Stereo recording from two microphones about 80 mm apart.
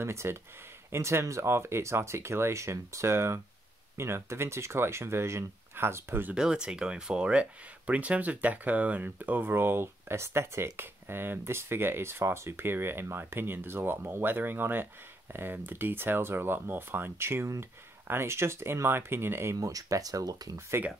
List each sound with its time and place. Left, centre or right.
0.0 s speech: right
6.3 s speech: centre; by 19.5 s right
19.5 s speech: right